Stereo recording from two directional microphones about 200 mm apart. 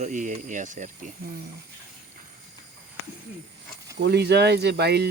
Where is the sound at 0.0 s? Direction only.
40° right (ahead or behind).